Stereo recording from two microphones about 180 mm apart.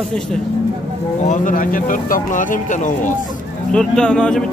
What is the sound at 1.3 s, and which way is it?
Speech, 50° left (ahead or behind).